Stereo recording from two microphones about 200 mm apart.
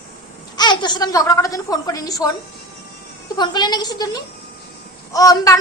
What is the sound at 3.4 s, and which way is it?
A woman's voice, 20° left (ahead or behind).